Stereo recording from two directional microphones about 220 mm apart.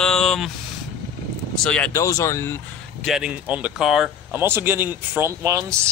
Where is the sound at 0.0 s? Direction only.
Centre (ahead or behind).